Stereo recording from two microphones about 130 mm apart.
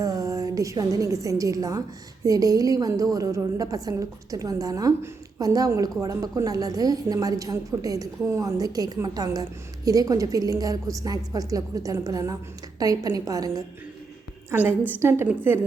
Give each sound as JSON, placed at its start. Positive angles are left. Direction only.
{"t": 0.0, "sound": "a woman's voice", "side_deg": -25}
{"t": 14.5, "sound": "a woman's voice", "side_deg": -15}